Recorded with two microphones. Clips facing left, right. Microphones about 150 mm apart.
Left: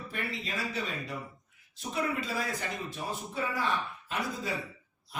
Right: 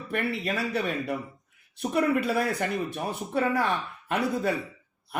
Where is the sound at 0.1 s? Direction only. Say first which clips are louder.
Right 10 dB; 60° right (ahead or behind).